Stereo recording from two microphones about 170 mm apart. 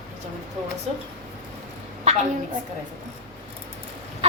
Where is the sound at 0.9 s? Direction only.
35° right (ahead or behind).